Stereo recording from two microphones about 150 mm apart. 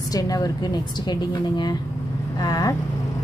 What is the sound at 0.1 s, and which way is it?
A woman's voice, 25° left (ahead or behind).